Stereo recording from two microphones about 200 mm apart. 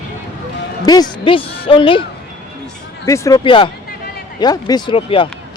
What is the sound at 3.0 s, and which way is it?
Speech, 15° left (ahead or behind).